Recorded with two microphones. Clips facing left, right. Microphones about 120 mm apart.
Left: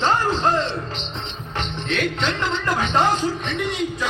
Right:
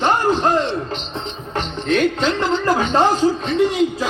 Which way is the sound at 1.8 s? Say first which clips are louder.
Right 7 dB; 45° right (ahead or behind).